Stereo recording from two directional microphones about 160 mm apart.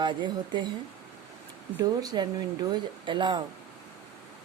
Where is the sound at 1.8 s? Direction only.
25° right (ahead or behind).